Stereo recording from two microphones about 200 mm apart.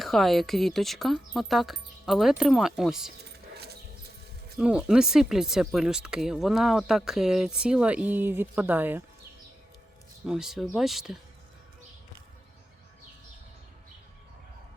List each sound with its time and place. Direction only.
0.0 s speech: centre (ahead or behind)
3.5 s a sound: 55° right (ahead or behind)
4.5 s speech: 5° right (ahead or behind)
10.2 s speech: centre (ahead or behind)